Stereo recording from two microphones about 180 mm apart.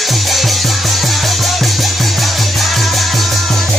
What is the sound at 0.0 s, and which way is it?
Music, centre (ahead or behind).